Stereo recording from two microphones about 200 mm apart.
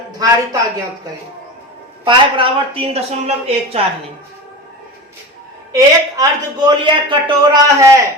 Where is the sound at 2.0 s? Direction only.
25° right (ahead or behind).